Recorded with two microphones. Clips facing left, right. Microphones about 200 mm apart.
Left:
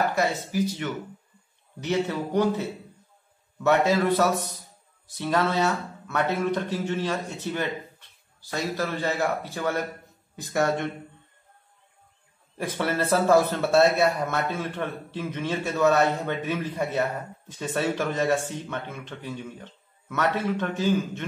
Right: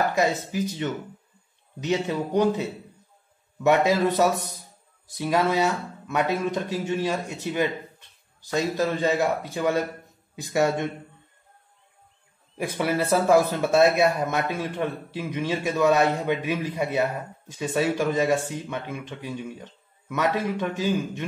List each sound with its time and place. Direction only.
0.1 s speech: 15° right (ahead or behind)
3.6 s speech: 15° right (ahead or behind)
12.5 s speech: 10° right (ahead or behind)